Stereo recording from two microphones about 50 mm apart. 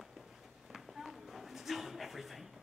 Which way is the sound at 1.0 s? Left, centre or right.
Centre.